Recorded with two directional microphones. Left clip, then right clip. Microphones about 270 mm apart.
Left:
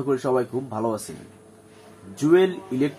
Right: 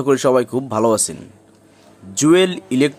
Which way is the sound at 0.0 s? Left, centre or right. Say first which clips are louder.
Right 8 dB; right.